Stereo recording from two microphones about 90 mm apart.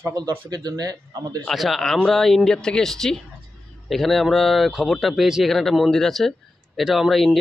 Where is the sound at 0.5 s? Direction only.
45° right (ahead or behind).